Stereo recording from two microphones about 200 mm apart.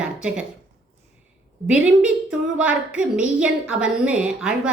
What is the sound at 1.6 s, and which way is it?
A woman's voice, 5° right (ahead or behind).